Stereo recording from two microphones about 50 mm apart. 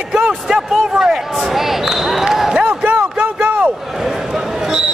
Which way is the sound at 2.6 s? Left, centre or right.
Right.